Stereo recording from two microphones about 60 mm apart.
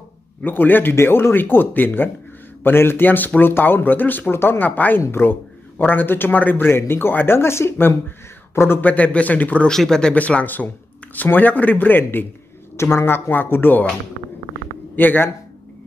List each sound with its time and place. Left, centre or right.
0.4 s speech: left
0.9 s speech: left
8.8 s a man's voice: left
9.7 s speech: centre
10.1 s a man's voice: left
15.0 s speech: left